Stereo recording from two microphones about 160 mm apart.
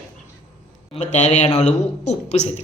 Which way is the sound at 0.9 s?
45° left (ahead or behind).